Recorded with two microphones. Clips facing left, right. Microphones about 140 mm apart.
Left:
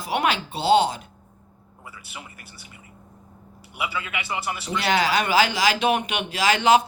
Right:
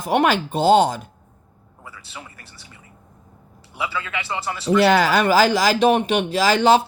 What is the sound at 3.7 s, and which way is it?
Speech, 20° left (ahead or behind).